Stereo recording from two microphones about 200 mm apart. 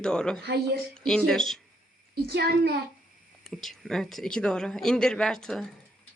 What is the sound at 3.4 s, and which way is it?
Speech, centre (ahead or behind).